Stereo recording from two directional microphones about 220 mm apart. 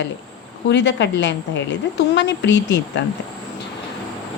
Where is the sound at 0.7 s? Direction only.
55° left (ahead or behind).